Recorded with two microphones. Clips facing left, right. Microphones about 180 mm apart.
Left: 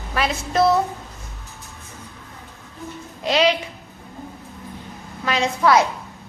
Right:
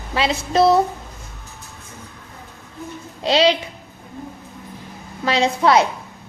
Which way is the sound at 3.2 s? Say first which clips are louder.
Right 2 dB; 30° right (ahead or behind).